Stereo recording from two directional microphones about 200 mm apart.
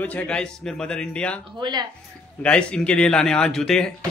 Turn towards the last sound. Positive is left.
turn(degrees=5)  # may be behind; listen again after turning